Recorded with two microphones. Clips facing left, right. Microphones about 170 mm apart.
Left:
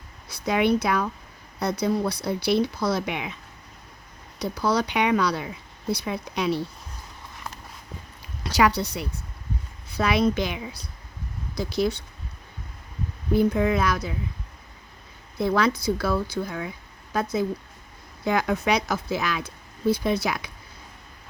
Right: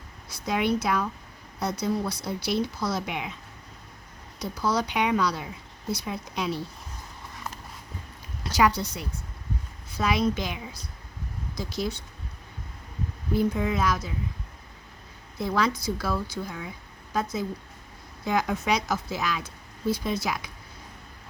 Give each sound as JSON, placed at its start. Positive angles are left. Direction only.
{"t": 0.3, "sound": "speech", "side_deg": 65}
{"t": 4.4, "sound": "speech", "side_deg": 65}
{"t": 8.4, "sound": "speech", "side_deg": 70}
{"t": 13.3, "sound": "speech", "side_deg": 65}
{"t": 15.4, "sound": "speech", "side_deg": 65}
{"t": 18.3, "sound": "speech", "side_deg": 65}